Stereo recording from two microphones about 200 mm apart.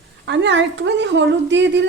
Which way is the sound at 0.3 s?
65° right (ahead or behind).